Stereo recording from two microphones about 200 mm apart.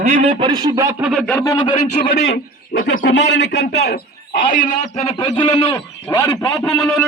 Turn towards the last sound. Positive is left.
turn(degrees=0)  # may be behind; listen again after turning